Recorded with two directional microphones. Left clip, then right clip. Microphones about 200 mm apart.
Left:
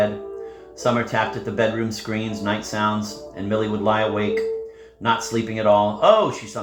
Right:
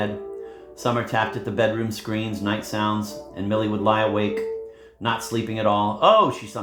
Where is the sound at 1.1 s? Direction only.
30° right (ahead or behind).